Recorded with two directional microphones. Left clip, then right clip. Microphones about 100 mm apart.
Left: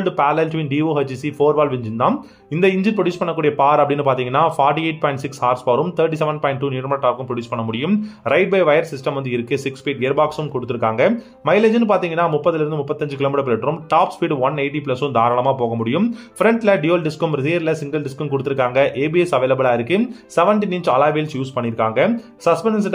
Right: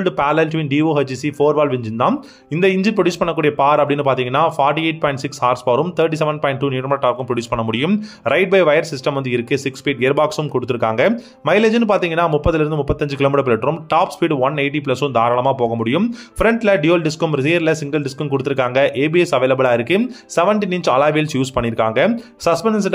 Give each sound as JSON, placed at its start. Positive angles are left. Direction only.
{"t": 0.0, "sound": "speech", "side_deg": -20}
{"t": 3.3, "sound": "speech", "side_deg": -10}
{"t": 10.1, "sound": "speech", "side_deg": -35}